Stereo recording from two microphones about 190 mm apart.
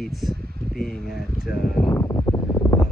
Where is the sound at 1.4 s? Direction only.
50° left (ahead or behind).